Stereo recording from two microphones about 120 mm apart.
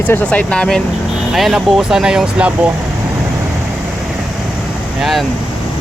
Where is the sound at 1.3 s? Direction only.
Centre (ahead or behind).